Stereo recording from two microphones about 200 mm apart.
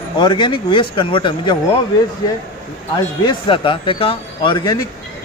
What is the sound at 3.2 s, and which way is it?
Speech, 25° left (ahead or behind).